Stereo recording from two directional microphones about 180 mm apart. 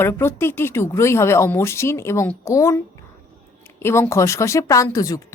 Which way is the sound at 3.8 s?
15° left (ahead or behind).